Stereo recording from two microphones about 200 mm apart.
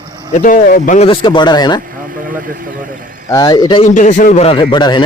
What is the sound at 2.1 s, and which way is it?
Speech, 45° right (ahead or behind).